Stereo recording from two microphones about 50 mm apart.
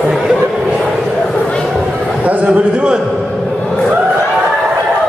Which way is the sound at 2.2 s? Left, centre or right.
Right.